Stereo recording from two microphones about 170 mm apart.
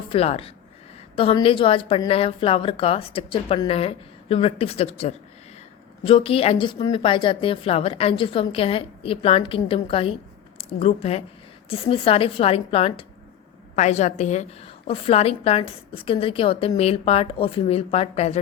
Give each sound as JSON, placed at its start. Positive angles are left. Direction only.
{"t": 0.1, "sound": "a woman's voice", "side_deg": 35}